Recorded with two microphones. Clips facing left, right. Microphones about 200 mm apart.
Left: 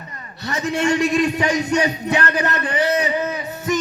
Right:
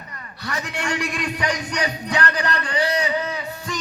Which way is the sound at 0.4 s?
25° left (ahead or behind).